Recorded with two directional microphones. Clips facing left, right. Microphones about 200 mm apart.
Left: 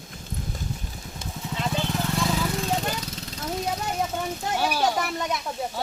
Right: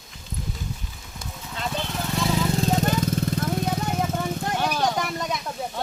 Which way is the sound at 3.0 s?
50° right (ahead or behind).